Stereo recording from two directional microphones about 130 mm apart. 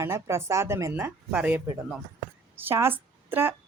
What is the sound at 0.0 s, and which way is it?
Speech, 20° right (ahead or behind).